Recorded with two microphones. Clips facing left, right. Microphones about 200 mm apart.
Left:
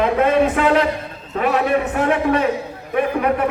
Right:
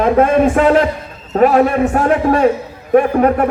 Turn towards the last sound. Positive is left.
turn(degrees=-45)  # may be behind; listen again after turning